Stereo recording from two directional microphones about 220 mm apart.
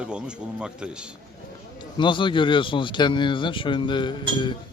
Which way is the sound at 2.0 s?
20° left (ahead or behind).